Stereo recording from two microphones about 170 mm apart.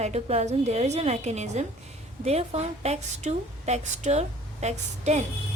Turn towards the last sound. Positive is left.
turn(degrees=-40)  # may be behind; listen again after turning